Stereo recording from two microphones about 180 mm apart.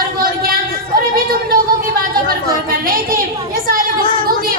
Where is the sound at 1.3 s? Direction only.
55° right (ahead or behind).